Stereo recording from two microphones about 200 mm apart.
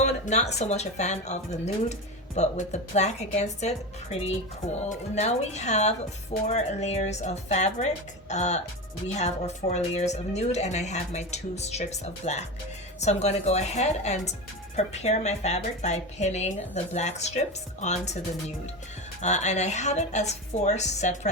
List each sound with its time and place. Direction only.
0.0 s speech: 35° left (ahead or behind)
19.2 s speech: 35° left (ahead or behind)